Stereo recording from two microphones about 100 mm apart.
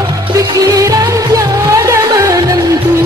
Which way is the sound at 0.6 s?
35° right (ahead or behind).